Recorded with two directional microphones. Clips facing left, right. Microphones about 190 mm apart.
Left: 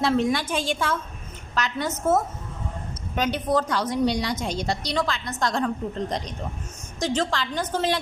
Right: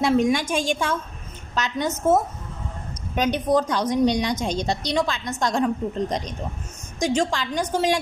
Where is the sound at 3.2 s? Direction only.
20° right (ahead or behind).